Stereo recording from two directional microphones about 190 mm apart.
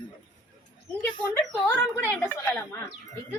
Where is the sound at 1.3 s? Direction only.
10° left (ahead or behind).